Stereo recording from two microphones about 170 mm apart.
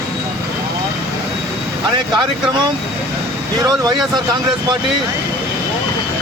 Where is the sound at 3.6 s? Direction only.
20° right (ahead or behind).